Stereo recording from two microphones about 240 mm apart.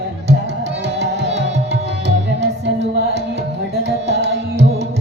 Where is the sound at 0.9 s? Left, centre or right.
Right.